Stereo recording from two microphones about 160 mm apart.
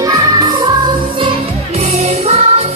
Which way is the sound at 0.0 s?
20° right (ahead or behind).